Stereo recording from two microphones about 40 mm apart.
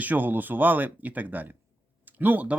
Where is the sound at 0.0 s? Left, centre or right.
Right.